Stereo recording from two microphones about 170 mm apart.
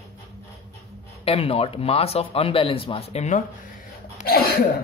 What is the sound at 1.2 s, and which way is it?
Speech, 35° left (ahead or behind).